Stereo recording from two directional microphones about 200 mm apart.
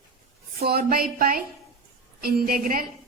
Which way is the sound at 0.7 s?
50° right (ahead or behind).